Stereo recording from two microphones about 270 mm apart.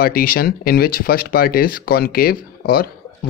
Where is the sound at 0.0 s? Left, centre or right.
Left.